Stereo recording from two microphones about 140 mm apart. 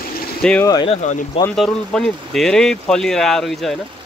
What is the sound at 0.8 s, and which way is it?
Speech, 45° left (ahead or behind).